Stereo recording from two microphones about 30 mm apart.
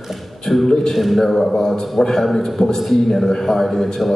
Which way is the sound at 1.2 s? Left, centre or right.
Centre.